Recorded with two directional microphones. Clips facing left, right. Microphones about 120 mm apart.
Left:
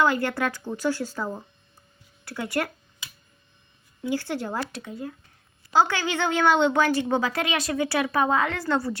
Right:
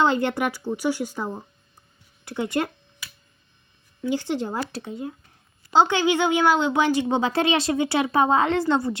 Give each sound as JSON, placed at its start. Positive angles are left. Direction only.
{"t": 0.0, "sound": "a woman's voice", "side_deg": -25}
{"t": 4.1, "sound": "a woman's voice", "side_deg": -20}
{"t": 6.7, "sound": "a woman's voice", "side_deg": -15}